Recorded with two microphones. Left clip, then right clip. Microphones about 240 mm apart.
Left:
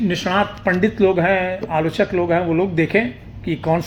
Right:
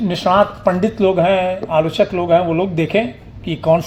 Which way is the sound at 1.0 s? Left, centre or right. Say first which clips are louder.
Right 3 dB; right.